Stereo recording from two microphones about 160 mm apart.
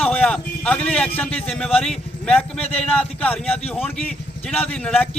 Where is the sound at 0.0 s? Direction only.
10° left (ahead or behind).